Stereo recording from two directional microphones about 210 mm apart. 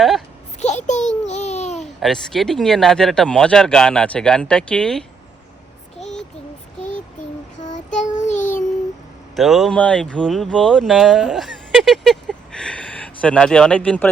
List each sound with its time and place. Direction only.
0.9 s babbling: 35° left (ahead or behind)
2.0 s speech: centre (ahead or behind)
7.6 s child singing: 35° left (ahead or behind)
9.3 s speech: centre (ahead or behind)